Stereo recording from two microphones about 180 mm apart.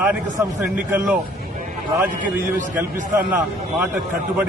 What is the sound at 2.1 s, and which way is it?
Speech, 45° right (ahead or behind).